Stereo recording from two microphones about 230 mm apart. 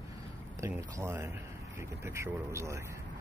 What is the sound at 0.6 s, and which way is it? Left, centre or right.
Speech, centre.